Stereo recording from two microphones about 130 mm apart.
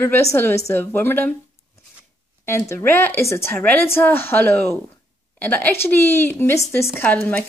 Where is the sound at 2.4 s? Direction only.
20° left (ahead or behind).